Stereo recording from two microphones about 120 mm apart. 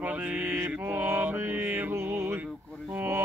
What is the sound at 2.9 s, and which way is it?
Music, 20° right (ahead or behind).